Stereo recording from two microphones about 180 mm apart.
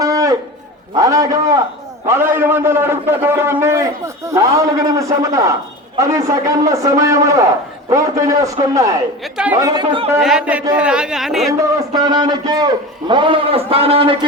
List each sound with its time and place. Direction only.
0.0 s a sound: 20° right (ahead or behind)
0.9 s a man's voice: 20° right (ahead or behind)
9.2 s speech: 5° right (ahead or behind)
9.6 s a man's voice: 20° right (ahead or behind)
10.2 s speech: 5° right (ahead or behind)
11.9 s a man's voice: 25° right (ahead or behind)